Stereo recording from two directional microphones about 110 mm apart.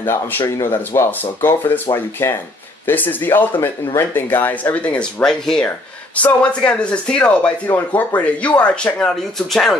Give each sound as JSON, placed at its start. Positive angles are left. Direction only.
{"t": 0.0, "sound": "speech", "side_deg": 20}